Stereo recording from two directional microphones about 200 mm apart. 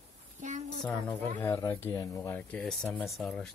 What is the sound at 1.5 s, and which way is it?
Speech, 15° left (ahead or behind).